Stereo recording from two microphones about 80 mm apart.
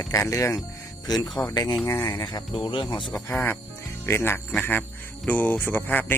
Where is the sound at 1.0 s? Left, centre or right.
Left.